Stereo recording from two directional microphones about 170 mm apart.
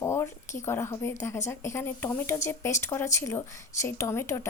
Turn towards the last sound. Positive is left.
turn(degrees=15)  # may be behind; listen again after turning